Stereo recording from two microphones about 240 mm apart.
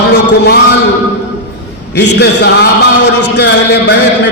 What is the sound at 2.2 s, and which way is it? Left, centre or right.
A man's voice, left.